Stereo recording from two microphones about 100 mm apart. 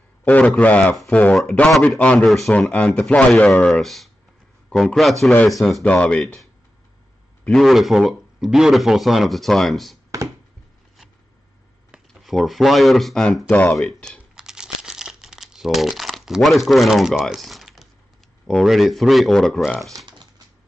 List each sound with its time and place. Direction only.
0.2 s a sound: 15° left (ahead or behind)
0.6 s speech: 15° left (ahead or behind)
2.2 s speech: centre (ahead or behind)
5.9 s speech: 15° left (ahead or behind)
7.6 s speech: centre (ahead or behind)
12.1 s speech: centre (ahead or behind)
14.3 s crumpling: 5° right (ahead or behind)
18.5 s speech: centre (ahead or behind)